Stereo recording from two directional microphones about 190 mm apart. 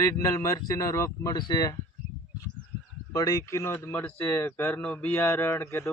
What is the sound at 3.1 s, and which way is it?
Speech, 15° left (ahead or behind).